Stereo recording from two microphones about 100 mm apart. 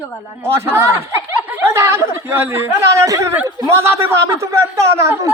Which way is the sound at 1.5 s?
25° right (ahead or behind).